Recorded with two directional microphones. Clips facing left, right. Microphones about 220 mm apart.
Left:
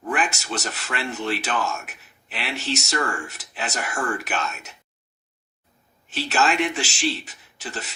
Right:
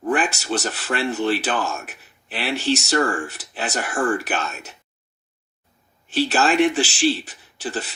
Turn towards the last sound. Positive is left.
turn(degrees=-30)  # may be behind; listen again after turning